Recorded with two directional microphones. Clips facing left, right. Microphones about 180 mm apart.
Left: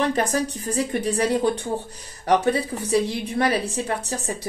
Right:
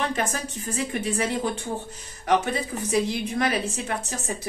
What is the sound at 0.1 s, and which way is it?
A woman's voice, 35° left (ahead or behind).